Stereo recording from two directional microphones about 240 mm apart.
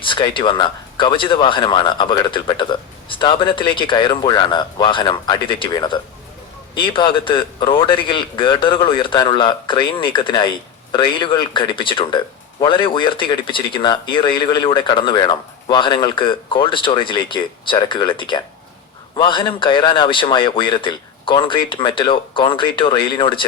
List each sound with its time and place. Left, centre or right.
0.0 s a man's voice: left